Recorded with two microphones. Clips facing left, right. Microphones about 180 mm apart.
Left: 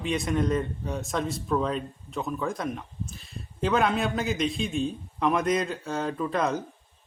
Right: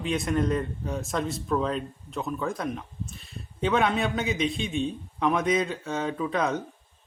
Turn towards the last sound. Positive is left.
turn(degrees=0)  # may be behind; listen again after turning